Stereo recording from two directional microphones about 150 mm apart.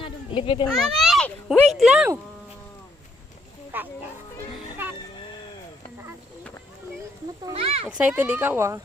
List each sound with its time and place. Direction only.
0.0 s children playing: 35° left (ahead or behind)
0.7 s a sound: centre (ahead or behind)
1.7 s speech: 5° right (ahead or behind)
3.7 s speech: 10° right (ahead or behind)
7.5 s a child's voice: 40° right (ahead or behind)
7.9 s speech: 10° right (ahead or behind)